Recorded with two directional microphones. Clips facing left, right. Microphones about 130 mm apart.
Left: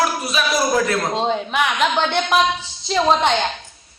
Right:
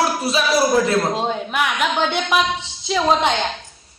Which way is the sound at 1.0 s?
5° right (ahead or behind).